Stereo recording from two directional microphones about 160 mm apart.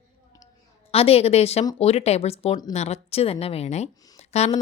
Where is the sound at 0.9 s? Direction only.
40° left (ahead or behind).